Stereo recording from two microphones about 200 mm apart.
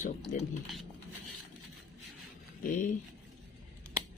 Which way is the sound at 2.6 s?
40° left (ahead or behind).